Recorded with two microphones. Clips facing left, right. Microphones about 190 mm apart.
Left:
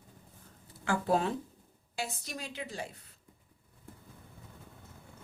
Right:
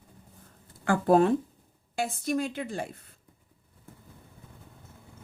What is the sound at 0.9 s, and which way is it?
Speech, 50° right (ahead or behind).